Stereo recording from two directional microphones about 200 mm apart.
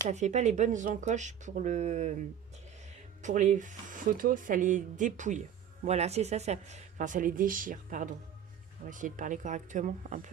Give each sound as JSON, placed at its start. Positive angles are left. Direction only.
{"t": 0.1, "sound": "speech", "side_deg": -35}
{"t": 3.2, "sound": "speech", "side_deg": -35}